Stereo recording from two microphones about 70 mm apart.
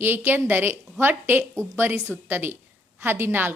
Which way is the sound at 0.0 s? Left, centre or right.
Right.